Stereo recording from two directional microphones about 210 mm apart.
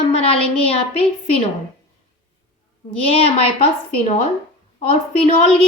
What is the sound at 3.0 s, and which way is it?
Speech, 25° left (ahead or behind).